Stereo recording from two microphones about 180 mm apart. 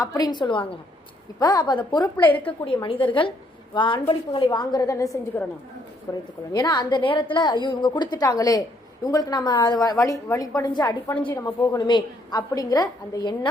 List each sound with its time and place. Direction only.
0.0 s a woman's voice: 20° left (ahead or behind)
2.2 s a woman's voice: 10° left (ahead or behind)
2.6 s a woman's voice: 30° left (ahead or behind)
11.1 s a woman's voice: 10° left (ahead or behind)
11.6 s a woman's voice: 20° left (ahead or behind)